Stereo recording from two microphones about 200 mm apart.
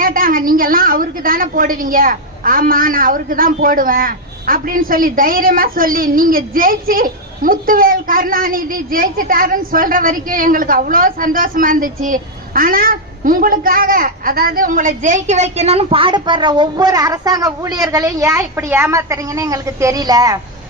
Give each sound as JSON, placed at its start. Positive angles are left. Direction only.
{"t": 0.0, "sound": "a woman's voice", "side_deg": -45}